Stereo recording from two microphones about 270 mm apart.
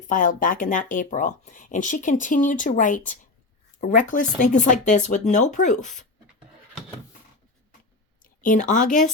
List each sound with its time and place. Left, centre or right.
0.1 s speech: left
8.2 s speech: left